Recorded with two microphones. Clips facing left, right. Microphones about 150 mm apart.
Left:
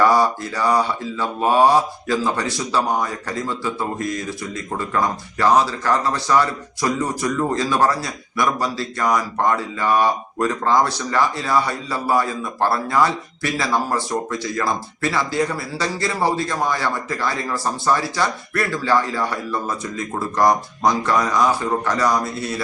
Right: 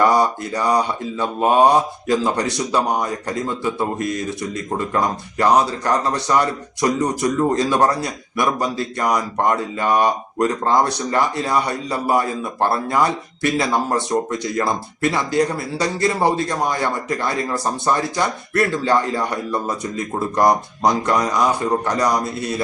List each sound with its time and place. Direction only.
0.0 s a man's voice: 15° right (ahead or behind)
4.9 s a man's voice: 15° right (ahead or behind)